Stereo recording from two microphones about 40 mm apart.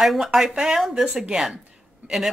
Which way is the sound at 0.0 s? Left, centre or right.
Centre.